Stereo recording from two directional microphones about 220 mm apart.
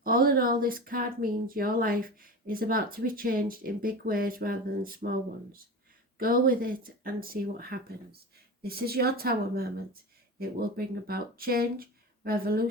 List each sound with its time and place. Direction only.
0.0 s a woman's voice: 40° right (ahead or behind)